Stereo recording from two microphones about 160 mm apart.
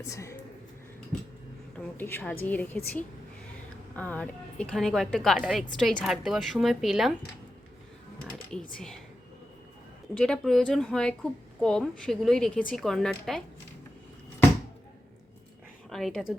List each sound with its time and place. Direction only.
0.0 s a woman's voice: 20° left (ahead or behind)
2.0 s a woman's voice: 10° left (ahead or behind)
10.2 s a woman's voice: 5° left (ahead or behind)
15.9 s a woman's voice: centre (ahead or behind)